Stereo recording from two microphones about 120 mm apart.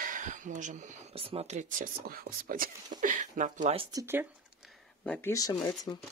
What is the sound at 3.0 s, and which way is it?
Speech, 90° right.